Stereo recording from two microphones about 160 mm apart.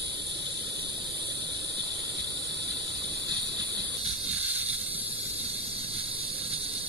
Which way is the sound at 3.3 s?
25° right (ahead or behind).